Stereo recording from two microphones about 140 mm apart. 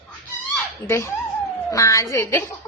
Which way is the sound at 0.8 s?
20° left (ahead or behind).